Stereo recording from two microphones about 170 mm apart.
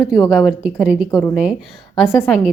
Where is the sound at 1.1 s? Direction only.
15° left (ahead or behind).